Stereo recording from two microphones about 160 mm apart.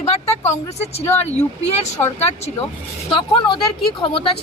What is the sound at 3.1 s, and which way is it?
Speech, 30° left (ahead or behind).